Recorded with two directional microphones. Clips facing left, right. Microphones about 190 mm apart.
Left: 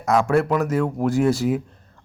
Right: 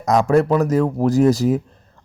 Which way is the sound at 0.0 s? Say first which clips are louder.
Right 3 dB; 40° right (ahead or behind).